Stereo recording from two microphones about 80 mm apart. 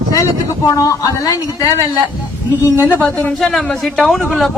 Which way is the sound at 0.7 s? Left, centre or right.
Left.